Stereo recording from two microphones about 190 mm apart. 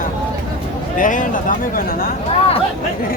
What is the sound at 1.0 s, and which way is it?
Speech, 45° left (ahead or behind).